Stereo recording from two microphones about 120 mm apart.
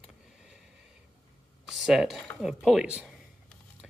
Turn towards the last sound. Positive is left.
turn(degrees=-5)  # may be behind; listen again after turning